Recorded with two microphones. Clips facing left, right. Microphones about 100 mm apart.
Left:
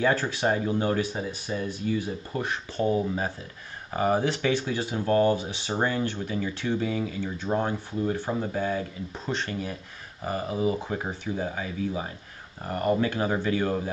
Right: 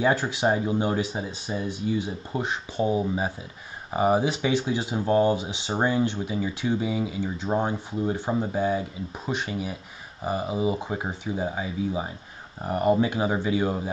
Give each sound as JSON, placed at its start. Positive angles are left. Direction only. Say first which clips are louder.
{"t": 0.0, "sound": "speech", "louder": "right 2 dB", "side_deg": -15}